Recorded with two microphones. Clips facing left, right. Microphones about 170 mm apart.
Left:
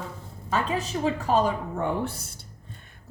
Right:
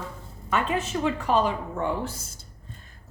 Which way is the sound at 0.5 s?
35° left (ahead or behind).